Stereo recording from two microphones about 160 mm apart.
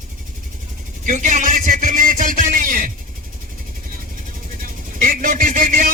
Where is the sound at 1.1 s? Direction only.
50° right (ahead or behind).